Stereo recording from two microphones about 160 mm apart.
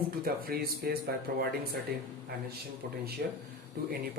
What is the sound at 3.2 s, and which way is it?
Speech, 80° right.